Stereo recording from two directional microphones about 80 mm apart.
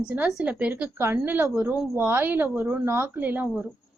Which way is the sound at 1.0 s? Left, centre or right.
Right.